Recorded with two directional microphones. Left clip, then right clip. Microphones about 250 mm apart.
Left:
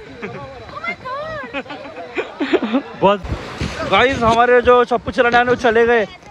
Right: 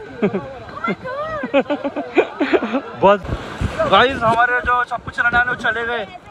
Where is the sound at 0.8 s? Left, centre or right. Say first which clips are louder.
Right 1 dB; centre.